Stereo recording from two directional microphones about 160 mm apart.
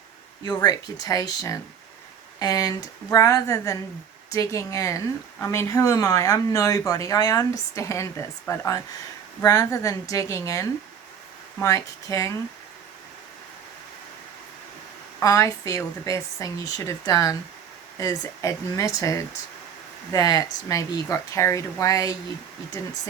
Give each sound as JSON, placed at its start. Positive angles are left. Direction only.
{"t": 0.4, "sound": "speech", "side_deg": 25}
{"t": 15.2, "sound": "speech", "side_deg": 20}